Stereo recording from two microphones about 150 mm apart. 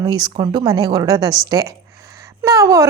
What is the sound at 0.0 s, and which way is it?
A woman's voice, 30° right (ahead or behind).